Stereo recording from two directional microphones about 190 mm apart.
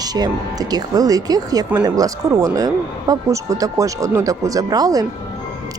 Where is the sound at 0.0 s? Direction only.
20° right (ahead or behind).